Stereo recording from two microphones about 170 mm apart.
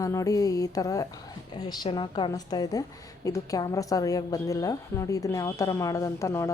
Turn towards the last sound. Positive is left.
turn(degrees=15)  # may be behind; listen again after turning